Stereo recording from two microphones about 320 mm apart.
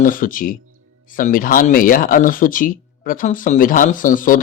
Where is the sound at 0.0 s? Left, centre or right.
Left.